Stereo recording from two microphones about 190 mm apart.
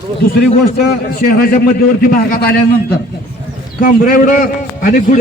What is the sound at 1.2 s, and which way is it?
Speech, 45° left (ahead or behind).